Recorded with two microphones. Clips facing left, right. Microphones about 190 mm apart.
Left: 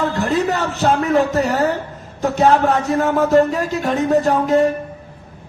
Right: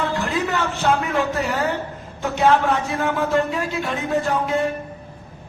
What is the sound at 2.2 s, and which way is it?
A man's voice, 40° left (ahead or behind).